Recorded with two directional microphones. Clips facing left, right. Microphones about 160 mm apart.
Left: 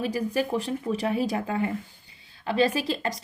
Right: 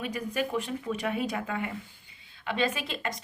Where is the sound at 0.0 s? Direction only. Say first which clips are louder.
Left 5 dB; 35° left (ahead or behind).